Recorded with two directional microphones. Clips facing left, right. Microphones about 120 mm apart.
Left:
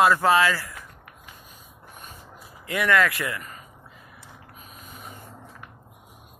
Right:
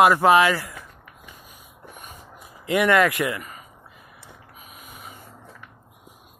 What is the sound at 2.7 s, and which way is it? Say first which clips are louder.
Speech: right 4 dB; 20° right (ahead or behind).